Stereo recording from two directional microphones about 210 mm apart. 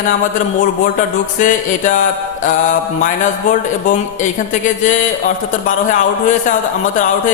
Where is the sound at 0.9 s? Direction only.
35° left (ahead or behind).